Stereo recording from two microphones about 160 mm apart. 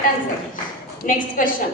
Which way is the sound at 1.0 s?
60° left (ahead or behind).